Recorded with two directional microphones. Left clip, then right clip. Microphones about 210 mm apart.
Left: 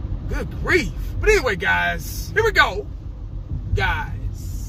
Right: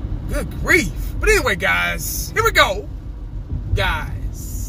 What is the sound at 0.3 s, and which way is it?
Speech, 20° right (ahead or behind).